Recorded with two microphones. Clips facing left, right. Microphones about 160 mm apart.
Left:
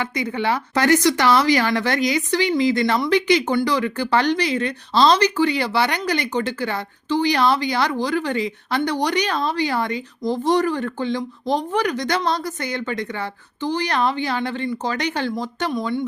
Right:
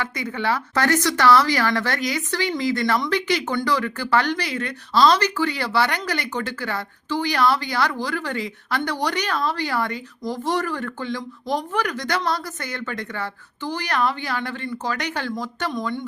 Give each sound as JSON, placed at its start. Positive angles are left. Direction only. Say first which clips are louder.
{"t": 0.0, "sound": "speech", "louder": "left 3 dB", "side_deg": 15}